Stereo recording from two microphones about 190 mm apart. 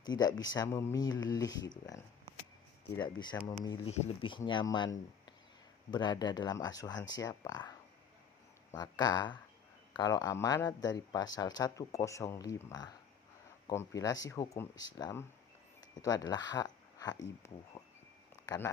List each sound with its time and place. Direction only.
0.0 s speech: 20° left (ahead or behind)
3.6 s speech: 20° left (ahead or behind)
8.7 s speech: 20° left (ahead or behind)